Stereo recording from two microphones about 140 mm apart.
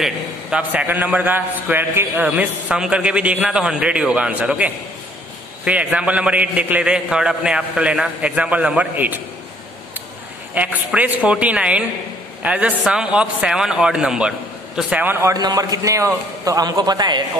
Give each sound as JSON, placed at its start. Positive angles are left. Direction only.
{"t": 0.0, "sound": "a man's voice", "side_deg": -10}
{"t": 10.5, "sound": "a man's voice", "side_deg": -10}
{"t": 15.3, "sound": "speech", "side_deg": -30}